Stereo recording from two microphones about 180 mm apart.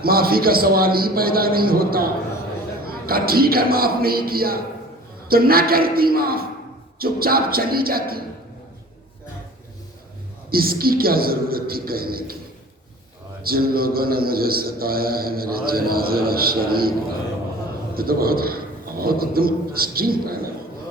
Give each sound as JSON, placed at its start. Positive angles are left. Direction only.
{"t": 0.0, "sound": "a man's voice", "side_deg": -55}
{"t": 10.5, "sound": "a man's voice", "side_deg": -55}
{"t": 13.4, "sound": "a man's voice", "side_deg": -55}
{"t": 17.9, "sound": "a man's voice", "side_deg": -55}